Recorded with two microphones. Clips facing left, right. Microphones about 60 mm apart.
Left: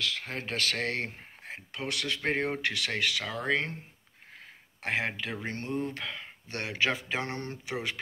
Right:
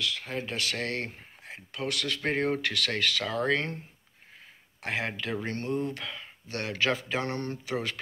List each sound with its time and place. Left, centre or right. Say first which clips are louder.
0.0 s speech: right 1 dB; left; by 3.7 s centre
4.8 s speech: even; left